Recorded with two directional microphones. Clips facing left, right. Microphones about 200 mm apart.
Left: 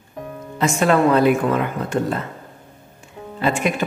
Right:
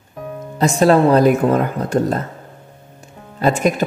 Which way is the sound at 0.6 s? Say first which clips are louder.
Right 4 dB; 35° right (ahead or behind).